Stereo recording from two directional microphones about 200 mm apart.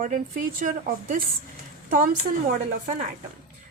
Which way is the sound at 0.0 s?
45° right (ahead or behind).